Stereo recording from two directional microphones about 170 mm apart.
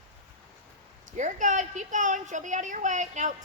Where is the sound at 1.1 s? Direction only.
45° right (ahead or behind).